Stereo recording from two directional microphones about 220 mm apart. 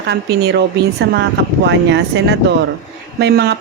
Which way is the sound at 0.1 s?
50° right (ahead or behind).